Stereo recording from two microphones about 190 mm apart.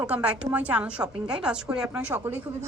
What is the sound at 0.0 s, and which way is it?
A woman's voice, 5° right (ahead or behind).